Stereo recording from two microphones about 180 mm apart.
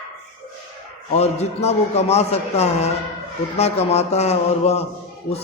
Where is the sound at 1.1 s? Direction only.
35° left (ahead or behind).